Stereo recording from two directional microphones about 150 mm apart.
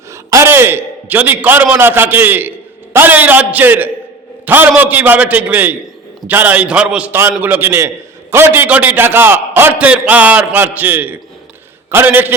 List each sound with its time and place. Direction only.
0.1 s a man's voice: 20° right (ahead or behind)